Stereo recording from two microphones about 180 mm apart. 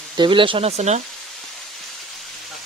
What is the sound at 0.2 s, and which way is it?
Speech, 25° right (ahead or behind).